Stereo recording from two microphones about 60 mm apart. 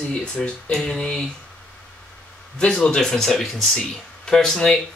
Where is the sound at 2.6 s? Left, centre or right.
Centre.